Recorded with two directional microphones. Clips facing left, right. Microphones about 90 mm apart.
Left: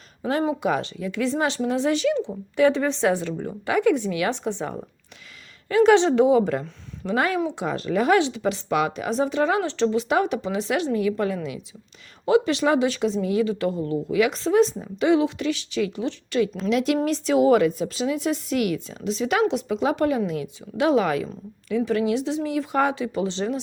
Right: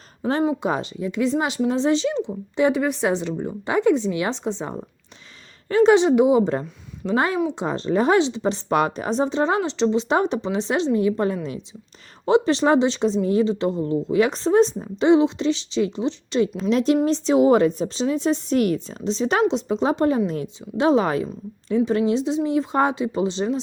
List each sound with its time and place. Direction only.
0.6 s speech: 25° right (ahead or behind)
5.6 s a woman's voice: 35° right (ahead or behind)
5.9 s a woman's voice: 15° right (ahead or behind)